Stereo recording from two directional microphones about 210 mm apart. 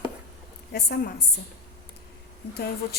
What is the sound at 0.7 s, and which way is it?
Speech, 50° left (ahead or behind).